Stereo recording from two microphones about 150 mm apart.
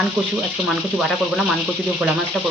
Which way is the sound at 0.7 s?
Centre (ahead or behind).